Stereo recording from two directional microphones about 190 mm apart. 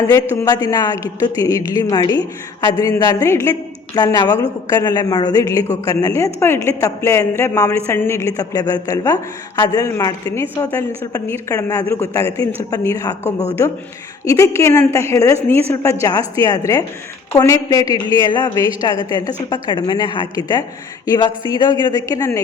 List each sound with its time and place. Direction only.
0.0 s a woman's voice: 15° left (ahead or behind)